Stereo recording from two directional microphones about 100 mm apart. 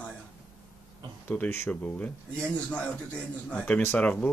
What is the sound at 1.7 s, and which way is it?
Speech, 15° left (ahead or behind).